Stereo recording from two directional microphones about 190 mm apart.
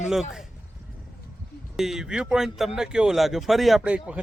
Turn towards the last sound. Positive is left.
turn(degrees=-5)  # may be behind; listen again after turning